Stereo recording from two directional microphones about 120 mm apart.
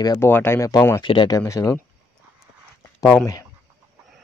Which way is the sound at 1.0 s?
40° left (ahead or behind).